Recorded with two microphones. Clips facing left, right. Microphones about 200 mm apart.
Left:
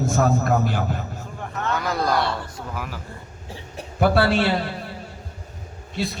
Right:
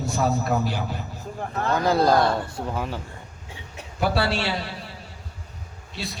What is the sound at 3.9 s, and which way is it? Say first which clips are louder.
Speech: left 5 dB; 55° left (ahead or behind).